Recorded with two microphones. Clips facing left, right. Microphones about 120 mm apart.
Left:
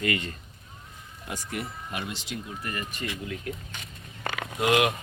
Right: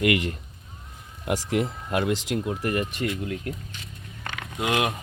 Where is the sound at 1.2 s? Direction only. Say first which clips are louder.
Right 10 dB; 85° right.